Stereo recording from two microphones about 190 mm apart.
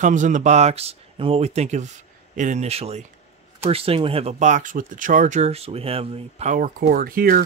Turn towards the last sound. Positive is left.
turn(degrees=-50)  # may be behind; listen again after turning